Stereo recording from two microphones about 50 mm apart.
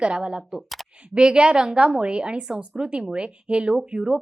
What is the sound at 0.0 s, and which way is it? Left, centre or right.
Speech, centre.